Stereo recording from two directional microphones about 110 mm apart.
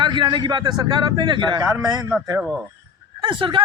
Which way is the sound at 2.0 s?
Centre (ahead or behind).